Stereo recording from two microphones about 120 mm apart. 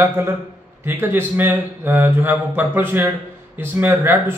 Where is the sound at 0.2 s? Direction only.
25° right (ahead or behind).